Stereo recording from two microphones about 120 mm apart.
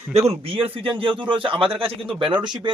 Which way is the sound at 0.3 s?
55° right (ahead or behind).